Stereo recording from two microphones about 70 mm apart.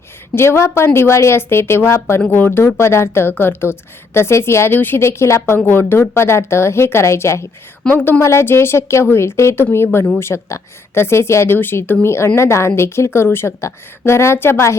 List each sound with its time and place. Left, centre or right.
0.3 s speech: left
5.0 s a woman's voice: left
7.9 s speech: left
8.2 s speech: left
11.5 s speech: left